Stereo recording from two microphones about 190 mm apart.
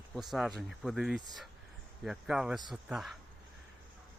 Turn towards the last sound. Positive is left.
turn(degrees=0)  # may be behind; listen again after turning